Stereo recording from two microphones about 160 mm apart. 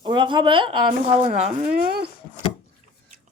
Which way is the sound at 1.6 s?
70° right (ahead or behind).